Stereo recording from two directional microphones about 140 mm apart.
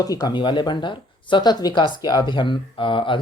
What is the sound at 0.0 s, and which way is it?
Speech, 25° left (ahead or behind).